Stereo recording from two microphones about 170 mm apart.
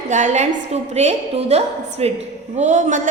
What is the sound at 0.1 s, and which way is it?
A woman's voice, 45° right (ahead or behind).